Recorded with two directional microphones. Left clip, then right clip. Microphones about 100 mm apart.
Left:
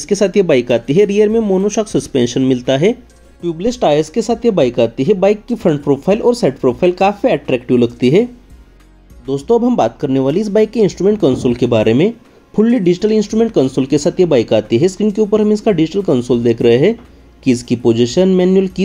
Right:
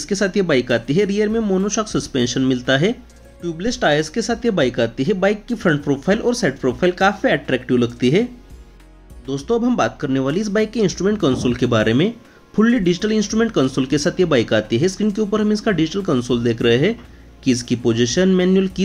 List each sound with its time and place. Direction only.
0.0 s speech: 35° left (ahead or behind)